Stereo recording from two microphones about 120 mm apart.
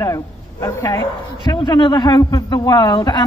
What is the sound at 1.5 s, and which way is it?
Speech, 35° left (ahead or behind).